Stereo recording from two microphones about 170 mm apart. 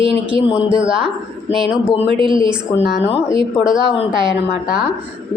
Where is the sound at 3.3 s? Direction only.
30° right (ahead or behind).